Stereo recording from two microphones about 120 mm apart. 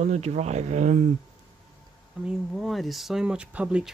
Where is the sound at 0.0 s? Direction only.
75° right (ahead or behind).